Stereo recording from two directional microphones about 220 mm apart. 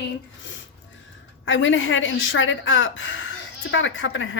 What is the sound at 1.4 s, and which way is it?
A woman's voice, 55° left (ahead or behind).